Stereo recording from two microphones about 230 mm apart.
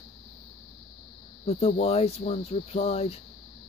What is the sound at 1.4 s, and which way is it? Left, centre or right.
Cricket, left.